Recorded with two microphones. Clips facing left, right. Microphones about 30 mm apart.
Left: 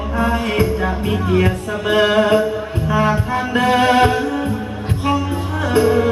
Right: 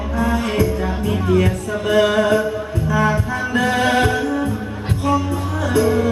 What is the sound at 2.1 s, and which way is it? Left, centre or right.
Mantra, left.